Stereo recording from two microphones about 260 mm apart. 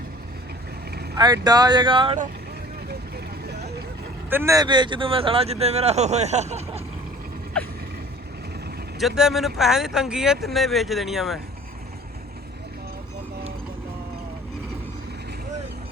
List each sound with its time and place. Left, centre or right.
1.1 s speech: centre
4.3 s speech: centre; by 6.8 s right
9.0 s speech: centre